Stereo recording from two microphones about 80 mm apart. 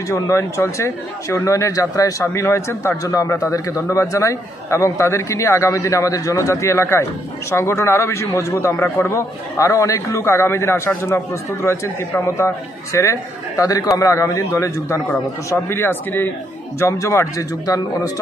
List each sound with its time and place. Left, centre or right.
0.1 s a man's voice: left
2.2 s a man's voice: left
16.8 s a man's voice: left